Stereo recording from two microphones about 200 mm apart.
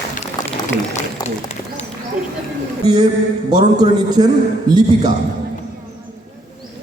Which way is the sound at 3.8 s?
20° right (ahead or behind).